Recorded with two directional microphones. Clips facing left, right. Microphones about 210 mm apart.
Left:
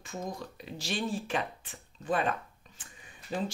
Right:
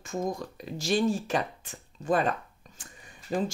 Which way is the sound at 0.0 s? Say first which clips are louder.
Right 7 dB; 45° right (ahead or behind).